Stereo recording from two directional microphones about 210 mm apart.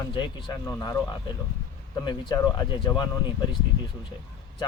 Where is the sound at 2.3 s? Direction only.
20° left (ahead or behind).